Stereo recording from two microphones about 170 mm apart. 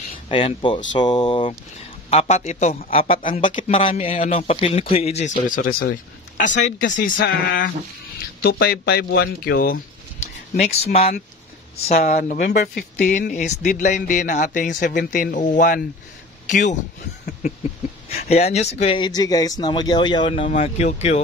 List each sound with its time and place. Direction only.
0.3 s speech: 30° left (ahead or behind)
2.0 s speech: 40° left (ahead or behind)
7.2 s speech: 60° left (ahead or behind)
10.2 s speech: 40° left (ahead or behind)
12.2 s speech: 50° left (ahead or behind)
18.9 s speech: 25° left (ahead or behind); by 21.2 s 40° left (ahead or behind)